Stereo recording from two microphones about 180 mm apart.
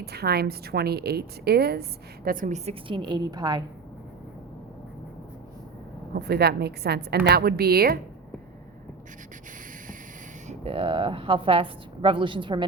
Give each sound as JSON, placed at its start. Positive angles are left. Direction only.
{"t": 0.0, "sound": "a woman's voice", "side_deg": -60}
{"t": 2.6, "sound": "a woman's voice", "side_deg": -30}
{"t": 6.1, "sound": "a woman's voice", "side_deg": -65}
{"t": 10.6, "sound": "a woman's voice", "side_deg": -30}